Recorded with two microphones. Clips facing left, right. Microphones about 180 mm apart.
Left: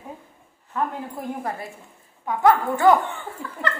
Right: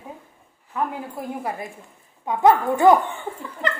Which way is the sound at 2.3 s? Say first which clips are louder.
Right 2 dB; 20° right (ahead or behind).